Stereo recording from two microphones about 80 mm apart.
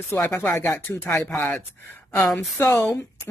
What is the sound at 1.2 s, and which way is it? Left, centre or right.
Speech, centre.